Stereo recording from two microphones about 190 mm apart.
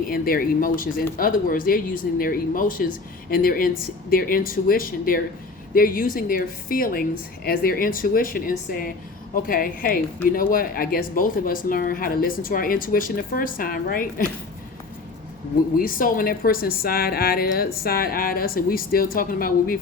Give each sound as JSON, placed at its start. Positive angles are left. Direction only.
{"t": 0.1, "sound": "speech", "side_deg": 50}
{"t": 15.8, "sound": "speech", "side_deg": 45}